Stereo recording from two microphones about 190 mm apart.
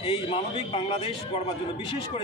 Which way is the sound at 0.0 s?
30° left (ahead or behind).